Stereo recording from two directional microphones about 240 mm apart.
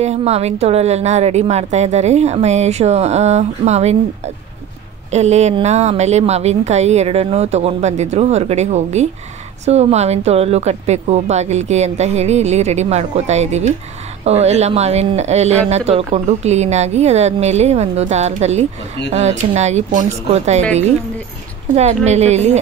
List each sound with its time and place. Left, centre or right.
0.0 s speech: right
21.7 s speech: right